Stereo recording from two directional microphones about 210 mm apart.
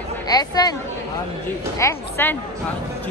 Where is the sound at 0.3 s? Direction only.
20° left (ahead or behind).